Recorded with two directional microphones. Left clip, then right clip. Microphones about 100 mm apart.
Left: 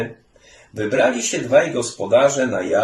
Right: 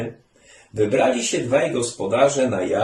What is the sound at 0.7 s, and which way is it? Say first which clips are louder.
Speech: even; 40° right (ahead or behind).